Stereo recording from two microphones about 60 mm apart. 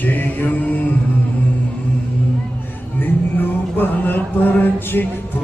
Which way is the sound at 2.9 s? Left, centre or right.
Left.